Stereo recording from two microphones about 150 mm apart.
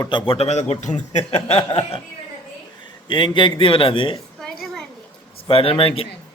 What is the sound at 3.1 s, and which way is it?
A man's voice, 30° left (ahead or behind).